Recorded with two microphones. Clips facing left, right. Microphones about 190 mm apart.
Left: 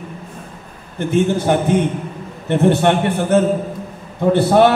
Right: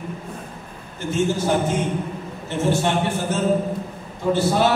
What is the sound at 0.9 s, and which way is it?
A man's voice, 60° left (ahead or behind).